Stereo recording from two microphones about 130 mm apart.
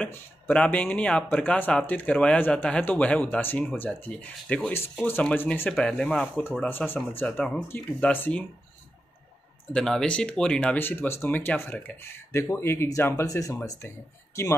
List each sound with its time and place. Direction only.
0.0 s speech: 10° left (ahead or behind)
9.7 s speech: 5° left (ahead or behind); by 14.6 s 20° left (ahead or behind)